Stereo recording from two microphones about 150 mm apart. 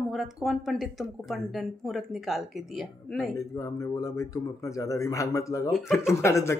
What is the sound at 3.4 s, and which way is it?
Speech, 20° left (ahead or behind).